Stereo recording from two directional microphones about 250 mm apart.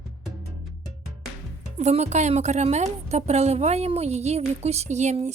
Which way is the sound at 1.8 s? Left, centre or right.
Right.